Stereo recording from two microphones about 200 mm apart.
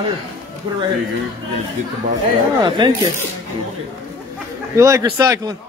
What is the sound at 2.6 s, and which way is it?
Speech, 25° right (ahead or behind).